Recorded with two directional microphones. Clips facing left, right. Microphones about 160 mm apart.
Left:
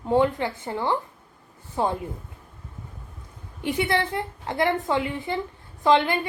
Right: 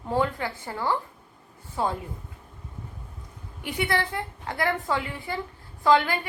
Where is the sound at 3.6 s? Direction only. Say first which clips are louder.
Left 3 dB; 25° left (ahead or behind).